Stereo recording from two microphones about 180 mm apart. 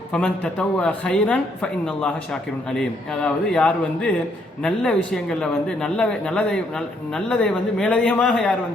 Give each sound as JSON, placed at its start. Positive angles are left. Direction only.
{"t": 0.1, "sound": "a woman's voice", "side_deg": 5}